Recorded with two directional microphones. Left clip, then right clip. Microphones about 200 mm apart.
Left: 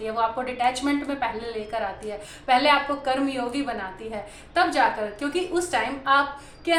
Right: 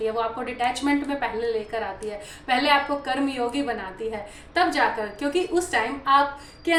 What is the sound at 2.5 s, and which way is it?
A woman's voice, 15° left (ahead or behind).